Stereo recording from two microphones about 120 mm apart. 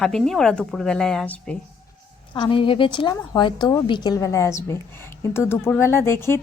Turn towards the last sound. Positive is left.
turn(degrees=20)  # may be behind; listen again after turning